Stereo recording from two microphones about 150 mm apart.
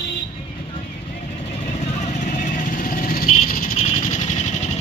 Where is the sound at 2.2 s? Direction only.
55° left (ahead or behind); by 3.7 s 70° left (ahead or behind).